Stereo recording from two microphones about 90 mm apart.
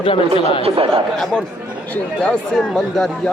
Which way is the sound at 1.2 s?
5° left (ahead or behind).